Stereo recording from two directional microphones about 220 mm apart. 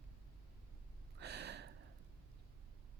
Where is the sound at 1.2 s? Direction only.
50° right (ahead or behind).